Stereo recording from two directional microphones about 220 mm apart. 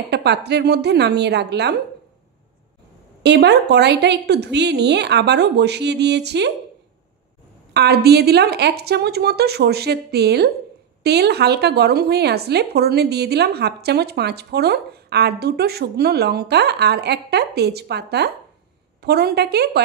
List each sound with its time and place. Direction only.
0.1 s speech: 50° right (ahead or behind)
3.2 s speech: 50° right (ahead or behind)
7.7 s speech: 45° right (ahead or behind)